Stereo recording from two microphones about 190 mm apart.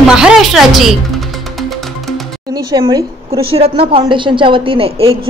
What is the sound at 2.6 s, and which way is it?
A woman's voice, 20° right (ahead or behind).